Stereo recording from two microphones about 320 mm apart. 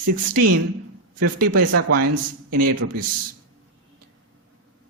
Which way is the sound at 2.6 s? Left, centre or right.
Right.